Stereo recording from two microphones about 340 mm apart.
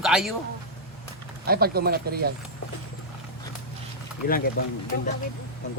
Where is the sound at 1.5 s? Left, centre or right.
Right.